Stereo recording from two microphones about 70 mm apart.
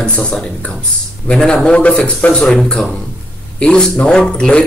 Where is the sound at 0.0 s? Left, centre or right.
Centre.